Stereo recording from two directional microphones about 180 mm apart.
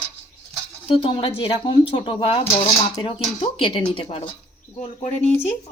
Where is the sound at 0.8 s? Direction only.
30° left (ahead or behind).